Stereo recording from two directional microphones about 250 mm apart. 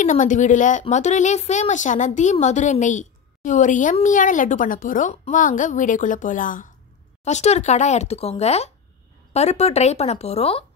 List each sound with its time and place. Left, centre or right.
0.0 s speech: left